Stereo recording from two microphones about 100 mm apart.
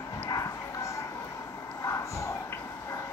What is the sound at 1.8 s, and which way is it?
Dog, 30° left (ahead or behind).